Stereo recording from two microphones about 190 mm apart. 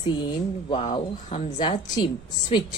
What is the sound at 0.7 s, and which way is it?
Speech, 30° left (ahead or behind).